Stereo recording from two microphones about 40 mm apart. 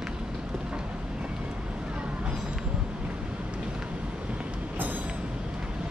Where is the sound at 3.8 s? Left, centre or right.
Right.